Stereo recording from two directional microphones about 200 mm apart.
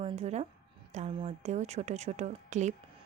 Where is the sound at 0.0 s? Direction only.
30° right (ahead or behind).